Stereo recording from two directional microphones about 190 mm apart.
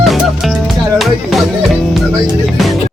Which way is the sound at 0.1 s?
Centre (ahead or behind).